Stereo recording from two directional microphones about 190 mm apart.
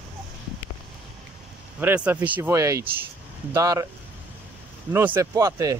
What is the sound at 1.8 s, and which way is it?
Speech, 10° right (ahead or behind).